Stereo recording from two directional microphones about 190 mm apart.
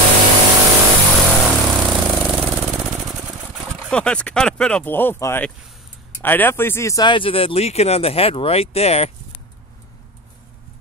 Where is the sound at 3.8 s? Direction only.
5° left (ahead or behind); by 9.1 s 30° left (ahead or behind).